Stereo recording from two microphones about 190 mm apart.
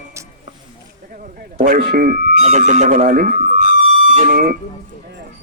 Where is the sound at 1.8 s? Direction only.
50° right (ahead or behind).